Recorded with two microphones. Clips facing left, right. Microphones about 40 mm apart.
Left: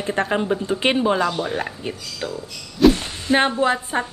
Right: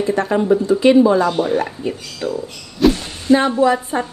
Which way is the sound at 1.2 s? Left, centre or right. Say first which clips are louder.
Right 5 dB; right.